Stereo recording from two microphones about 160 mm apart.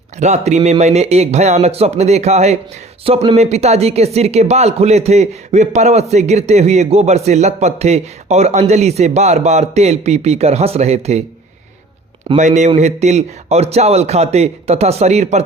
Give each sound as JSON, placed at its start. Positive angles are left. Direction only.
{"t": 0.2, "sound": "speech", "side_deg": -45}
{"t": 12.4, "sound": "speech", "side_deg": -45}